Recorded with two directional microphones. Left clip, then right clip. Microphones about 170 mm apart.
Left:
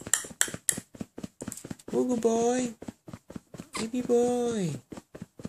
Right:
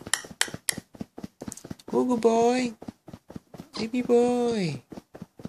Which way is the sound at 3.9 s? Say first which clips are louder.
Right 3 dB; 15° right (ahead or behind).